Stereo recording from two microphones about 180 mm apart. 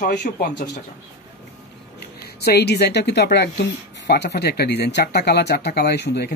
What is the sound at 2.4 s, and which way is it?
A woman's voice, 65° left (ahead or behind).